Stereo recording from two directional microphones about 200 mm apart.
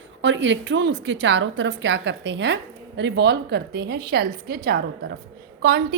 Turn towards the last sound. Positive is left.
turn(degrees=-50)  # may be behind; listen again after turning